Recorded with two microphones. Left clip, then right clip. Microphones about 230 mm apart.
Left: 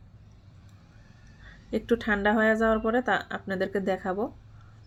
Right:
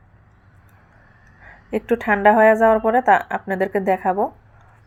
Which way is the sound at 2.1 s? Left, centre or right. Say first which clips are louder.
Right 12 dB; right.